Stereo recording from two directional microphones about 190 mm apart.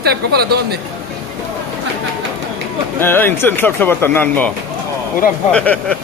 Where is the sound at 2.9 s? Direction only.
10° left (ahead or behind).